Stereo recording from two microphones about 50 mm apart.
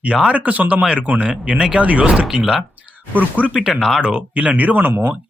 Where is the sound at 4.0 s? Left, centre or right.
Right.